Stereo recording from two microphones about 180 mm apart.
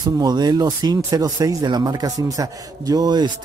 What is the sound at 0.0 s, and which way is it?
Speech, 25° right (ahead or behind).